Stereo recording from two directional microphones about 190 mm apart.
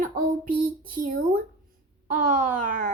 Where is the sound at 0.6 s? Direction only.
50° right (ahead or behind).